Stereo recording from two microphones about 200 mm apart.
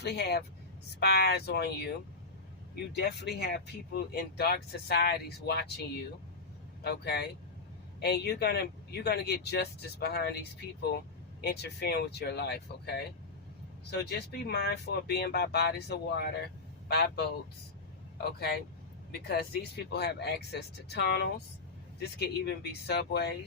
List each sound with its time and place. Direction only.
0.0 s speech: 55° left (ahead or behind)
2.9 s speech: 55° left (ahead or behind)
6.8 s speech: 55° left (ahead or behind)
18.2 s speech: 50° left (ahead or behind)
19.9 s speech: 55° left (ahead or behind)